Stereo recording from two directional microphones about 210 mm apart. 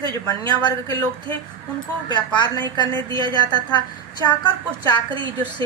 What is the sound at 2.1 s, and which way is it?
Speech, 20° left (ahead or behind).